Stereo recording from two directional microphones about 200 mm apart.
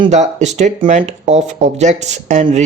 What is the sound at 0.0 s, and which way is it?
Speech, 35° right (ahead or behind).